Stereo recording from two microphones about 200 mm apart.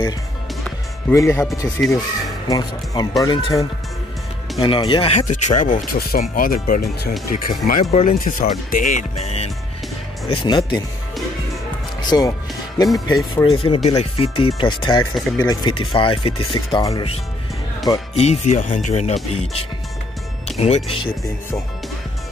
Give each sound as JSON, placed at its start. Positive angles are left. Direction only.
{"t": 1.1, "sound": "speech", "side_deg": 15}
{"t": 5.3, "sound": "speech", "side_deg": 40}
{"t": 7.9, "sound": "speech", "side_deg": 35}
{"t": 12.0, "sound": "music", "side_deg": 20}
{"t": 13.0, "sound": "speech", "side_deg": 20}
{"t": 15.1, "sound": "speech", "side_deg": 0}
{"t": 15.4, "sound": "speech", "side_deg": 20}
{"t": 20.4, "sound": "speech", "side_deg": 35}